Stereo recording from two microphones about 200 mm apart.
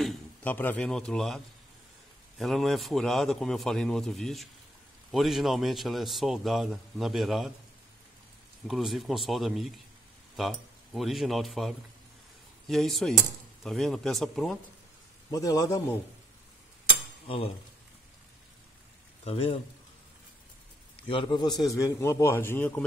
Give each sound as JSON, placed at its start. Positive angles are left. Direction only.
{"t": 0.0, "sound": "a man's voice", "side_deg": 5}
{"t": 8.6, "sound": "speech", "side_deg": 0}
{"t": 15.3, "sound": "a man's voice", "side_deg": 15}
{"t": 19.2, "sound": "a man's voice", "side_deg": 30}
{"t": 21.1, "sound": "a man's voice", "side_deg": 25}